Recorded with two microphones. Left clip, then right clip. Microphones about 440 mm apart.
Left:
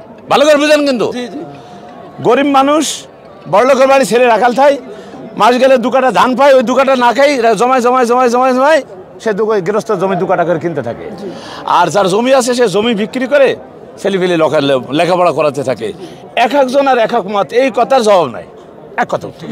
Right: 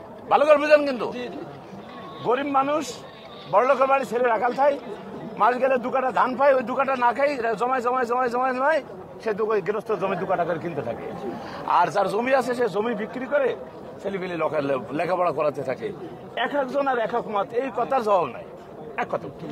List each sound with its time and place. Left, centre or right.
0.3 s a man's voice: left